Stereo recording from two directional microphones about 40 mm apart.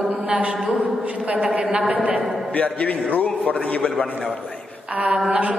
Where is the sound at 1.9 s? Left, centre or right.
Right.